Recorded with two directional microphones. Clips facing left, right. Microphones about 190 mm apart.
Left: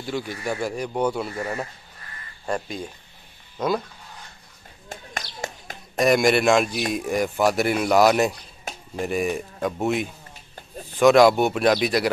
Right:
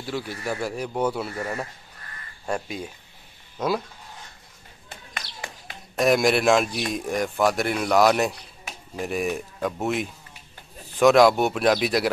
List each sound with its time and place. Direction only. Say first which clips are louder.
0.0 s a man's voice: left 2 dB; 5° right (ahead or behind)
4.8 s a sound: left 5 dB; 45° left (ahead or behind)
5.9 s a man's voice: left 1 dB; centre (ahead or behind)